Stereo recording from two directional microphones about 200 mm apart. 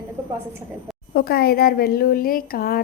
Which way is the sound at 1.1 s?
50° left (ahead or behind).